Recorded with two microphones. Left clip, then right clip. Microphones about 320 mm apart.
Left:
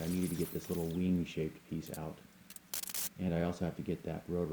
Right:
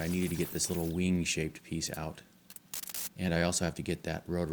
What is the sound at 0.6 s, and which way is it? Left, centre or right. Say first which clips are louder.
Speech: right 4 dB; right.